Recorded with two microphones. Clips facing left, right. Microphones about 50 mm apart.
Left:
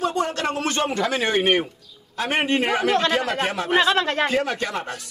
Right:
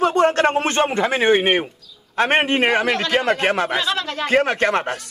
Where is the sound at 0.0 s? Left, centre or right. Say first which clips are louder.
Right 7 dB; right.